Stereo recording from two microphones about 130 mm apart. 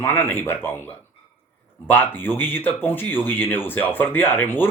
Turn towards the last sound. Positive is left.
turn(degrees=15)  # may be behind; listen again after turning